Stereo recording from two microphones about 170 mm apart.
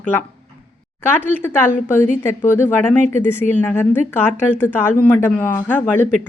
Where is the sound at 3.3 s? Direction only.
10° left (ahead or behind).